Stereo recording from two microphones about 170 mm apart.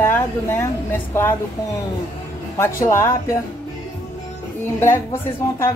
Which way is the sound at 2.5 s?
15° left (ahead or behind).